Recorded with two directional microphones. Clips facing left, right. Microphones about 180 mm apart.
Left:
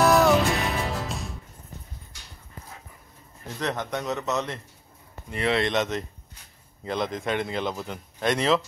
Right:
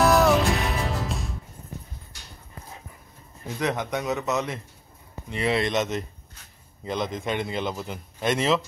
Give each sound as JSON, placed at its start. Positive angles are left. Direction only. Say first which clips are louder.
{"t": 0.0, "sound": "music", "louder": "even", "side_deg": 0}
{"t": 3.4, "sound": "a man's voice", "louder": "right 3 dB", "side_deg": -10}